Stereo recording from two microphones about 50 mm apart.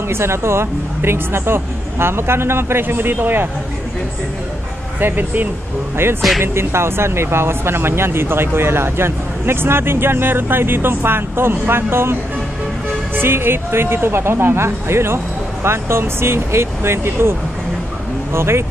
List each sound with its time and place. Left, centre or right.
0.1 s speech: right
5.0 s speech: right
6.4 s speech: right